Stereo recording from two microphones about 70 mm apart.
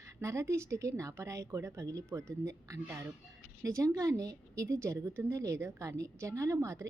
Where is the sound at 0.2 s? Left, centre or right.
Right.